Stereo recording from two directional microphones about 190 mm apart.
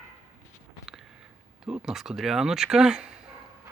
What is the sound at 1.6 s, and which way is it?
Speech, centre (ahead or behind).